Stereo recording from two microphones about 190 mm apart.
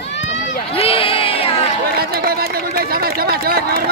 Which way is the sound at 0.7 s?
30° left (ahead or behind).